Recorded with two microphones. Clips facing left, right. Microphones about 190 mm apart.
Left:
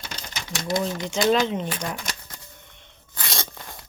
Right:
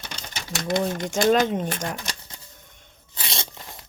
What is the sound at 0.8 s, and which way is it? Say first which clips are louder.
Speech: right 2 dB; 50° right (ahead or behind).